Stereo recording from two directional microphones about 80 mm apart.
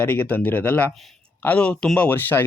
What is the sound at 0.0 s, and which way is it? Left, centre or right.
Speech, left.